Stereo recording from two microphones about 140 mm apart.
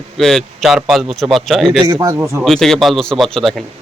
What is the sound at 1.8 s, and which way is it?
Speech, 30° right (ahead or behind).